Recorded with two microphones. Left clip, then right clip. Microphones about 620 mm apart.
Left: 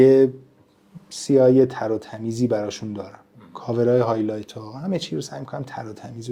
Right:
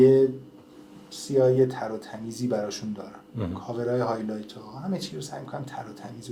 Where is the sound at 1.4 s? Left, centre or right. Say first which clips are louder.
Left 5 dB; left.